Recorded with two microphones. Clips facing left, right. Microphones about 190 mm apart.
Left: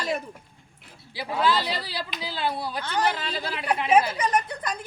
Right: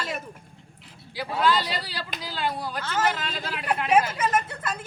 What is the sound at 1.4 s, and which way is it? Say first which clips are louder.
Speech: even; 10° left (ahead or behind).